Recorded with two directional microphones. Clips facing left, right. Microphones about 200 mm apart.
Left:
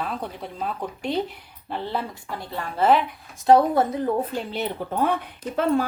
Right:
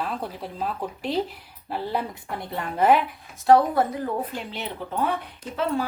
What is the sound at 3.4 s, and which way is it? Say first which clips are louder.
Speech: left 1 dB; 20° left (ahead or behind).